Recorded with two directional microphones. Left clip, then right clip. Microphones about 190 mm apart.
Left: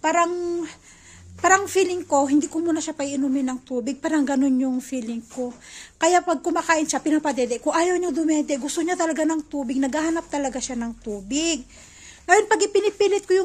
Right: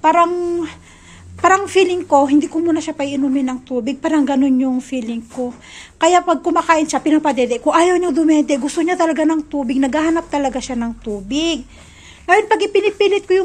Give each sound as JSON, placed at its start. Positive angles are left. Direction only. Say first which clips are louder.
{"t": 0.0, "sound": "a woman's voice", "louder": "right 8 dB", "side_deg": 25}